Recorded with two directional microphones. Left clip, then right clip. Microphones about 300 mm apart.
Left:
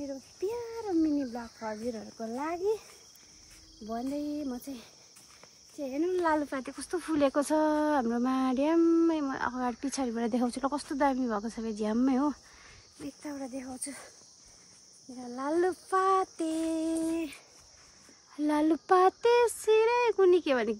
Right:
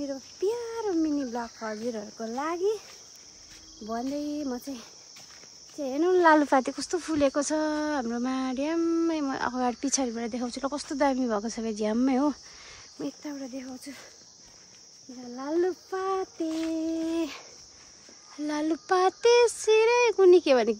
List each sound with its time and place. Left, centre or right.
0.0 s cricket: centre
3.8 s speech: centre
6.2 s speech: right
6.5 s speech: centre
6.9 s speech: centre
13.2 s a sound: centre
15.3 s a sound: centre
18.4 s speech: centre